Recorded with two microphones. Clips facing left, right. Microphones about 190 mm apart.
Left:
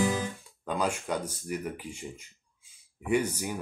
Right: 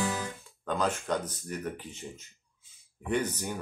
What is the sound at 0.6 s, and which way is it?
Speech, 10° left (ahead or behind).